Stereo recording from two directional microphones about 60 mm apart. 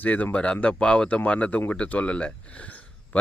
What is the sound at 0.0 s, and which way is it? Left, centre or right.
Speech, left.